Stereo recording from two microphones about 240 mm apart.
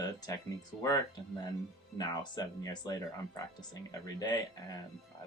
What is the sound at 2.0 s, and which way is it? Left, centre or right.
Speech, centre.